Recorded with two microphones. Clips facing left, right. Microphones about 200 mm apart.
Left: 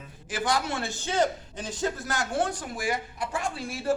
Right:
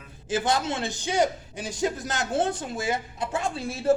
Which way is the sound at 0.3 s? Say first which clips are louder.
Right 3 dB; 25° right (ahead or behind).